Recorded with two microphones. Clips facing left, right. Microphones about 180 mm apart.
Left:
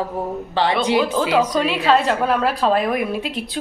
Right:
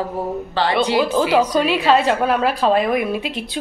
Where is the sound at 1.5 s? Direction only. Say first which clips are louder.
Right 1 dB; centre (ahead or behind).